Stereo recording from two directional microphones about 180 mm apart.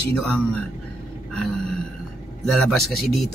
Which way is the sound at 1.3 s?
5° left (ahead or behind).